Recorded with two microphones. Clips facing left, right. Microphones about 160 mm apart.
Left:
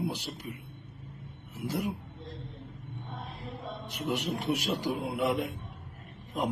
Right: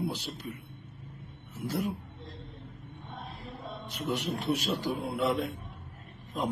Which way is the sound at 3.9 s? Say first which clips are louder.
Even; 15° left (ahead or behind).